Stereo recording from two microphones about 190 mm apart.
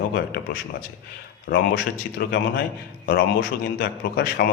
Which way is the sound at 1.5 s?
55° left (ahead or behind).